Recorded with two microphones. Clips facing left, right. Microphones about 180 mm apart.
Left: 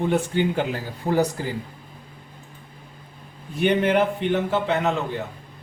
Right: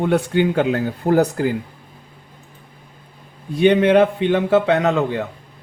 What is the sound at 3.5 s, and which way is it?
A man's voice, 90° right.